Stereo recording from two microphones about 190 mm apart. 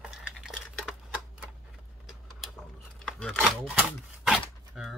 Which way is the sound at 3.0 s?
Centre (ahead or behind).